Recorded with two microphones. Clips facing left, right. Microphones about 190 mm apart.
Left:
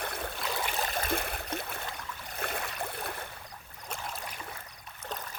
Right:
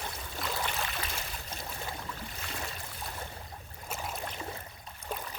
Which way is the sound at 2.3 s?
55° left (ahead or behind).